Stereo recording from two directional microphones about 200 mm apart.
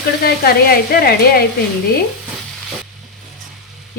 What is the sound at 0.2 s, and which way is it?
A woman's voice, 50° left (ahead or behind).